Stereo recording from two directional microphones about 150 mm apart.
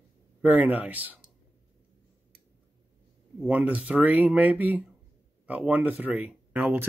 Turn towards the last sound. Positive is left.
turn(degrees=-10)  # may be behind; listen again after turning